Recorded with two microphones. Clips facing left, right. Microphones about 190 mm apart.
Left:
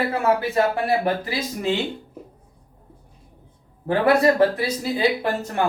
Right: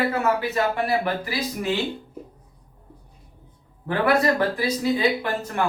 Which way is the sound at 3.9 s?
30° left (ahead or behind).